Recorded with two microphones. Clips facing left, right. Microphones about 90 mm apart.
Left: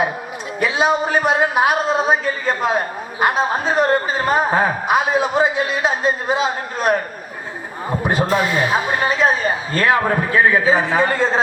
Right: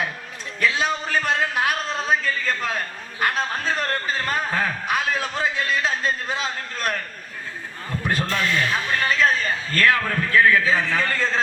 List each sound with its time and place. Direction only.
0.6 s a man's voice: 15° left (ahead or behind)